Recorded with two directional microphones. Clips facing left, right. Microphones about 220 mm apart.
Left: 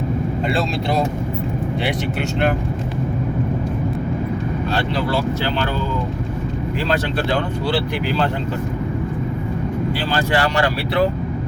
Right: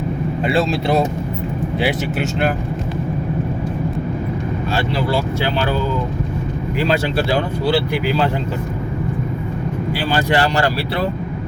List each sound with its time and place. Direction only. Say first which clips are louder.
1.8 s speech: right 5 dB; 5° right (ahead or behind)
4.7 s speech: right 2 dB; 10° right (ahead or behind)
6.8 s speech: right 3 dB; 10° right (ahead or behind)
10.1 s speech: right 3 dB; 25° right (ahead or behind)